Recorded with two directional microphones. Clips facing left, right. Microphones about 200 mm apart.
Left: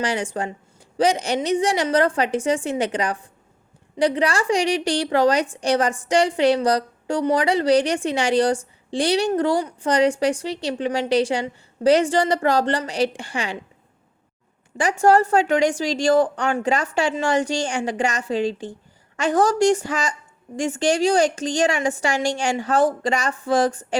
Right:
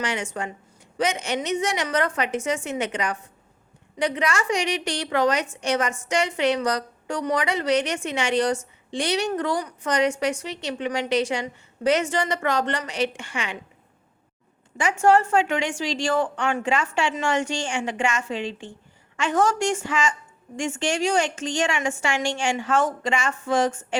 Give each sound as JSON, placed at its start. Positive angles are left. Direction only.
{"t": 0.0, "sound": "a woman's voice", "side_deg": 35}
{"t": 14.8, "sound": "a woman's voice", "side_deg": 35}